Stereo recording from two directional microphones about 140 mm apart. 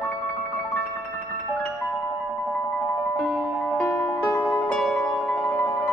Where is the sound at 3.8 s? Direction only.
15° left (ahead or behind).